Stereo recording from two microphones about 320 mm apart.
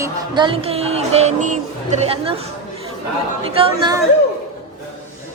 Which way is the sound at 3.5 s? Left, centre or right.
Centre.